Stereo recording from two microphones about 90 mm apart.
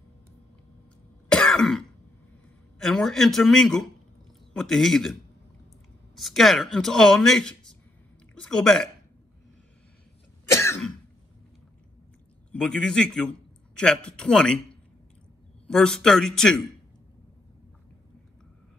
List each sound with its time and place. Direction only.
1.3 s throat clearing: 5° left (ahead or behind)
2.8 s speech: 5° left (ahead or behind)
6.1 s speech: centre (ahead or behind)
10.5 s cough: 30° left (ahead or behind)
12.5 s a man's voice: 5° left (ahead or behind)
15.7 s speech: 5° left (ahead or behind)